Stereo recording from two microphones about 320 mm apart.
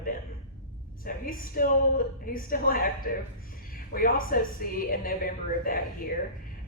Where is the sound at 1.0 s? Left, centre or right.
Left.